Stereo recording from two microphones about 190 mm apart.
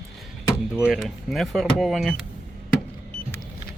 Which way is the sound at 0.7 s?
5° right (ahead or behind).